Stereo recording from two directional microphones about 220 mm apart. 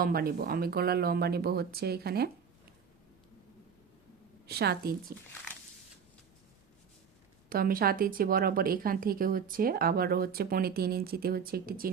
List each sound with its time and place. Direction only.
0.0 s speech: 40° right (ahead or behind)
4.4 s speech: 45° right (ahead or behind)
7.5 s speech: 40° right (ahead or behind)